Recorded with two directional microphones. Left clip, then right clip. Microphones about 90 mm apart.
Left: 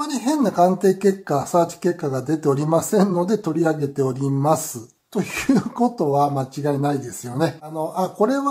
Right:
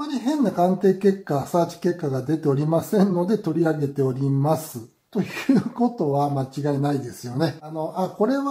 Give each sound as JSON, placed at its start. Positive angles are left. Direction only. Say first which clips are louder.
{"t": 0.0, "sound": "speech", "louder": "left 3 dB", "side_deg": 35}
{"t": 6.3, "sound": "speech", "louder": "left 2 dB", "side_deg": 15}